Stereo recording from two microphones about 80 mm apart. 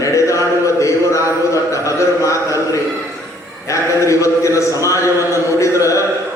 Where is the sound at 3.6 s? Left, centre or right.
Left.